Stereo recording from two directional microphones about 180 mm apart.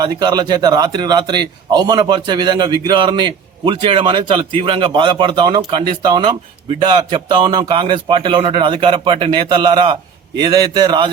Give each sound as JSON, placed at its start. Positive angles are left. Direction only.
{"t": 0.0, "sound": "a man's voice", "side_deg": -20}